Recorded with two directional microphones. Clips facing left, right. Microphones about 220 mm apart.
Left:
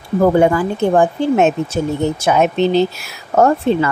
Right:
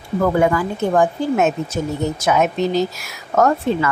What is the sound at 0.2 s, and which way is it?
Speech, 30° left (ahead or behind).